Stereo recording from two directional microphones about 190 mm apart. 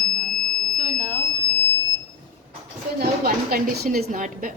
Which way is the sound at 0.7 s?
40° right (ahead or behind).